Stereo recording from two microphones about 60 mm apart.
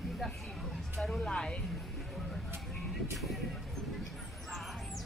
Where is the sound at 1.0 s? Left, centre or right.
Centre.